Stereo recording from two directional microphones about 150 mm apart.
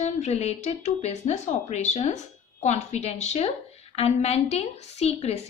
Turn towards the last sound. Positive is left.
turn(degrees=45)  # may be behind; listen again after turning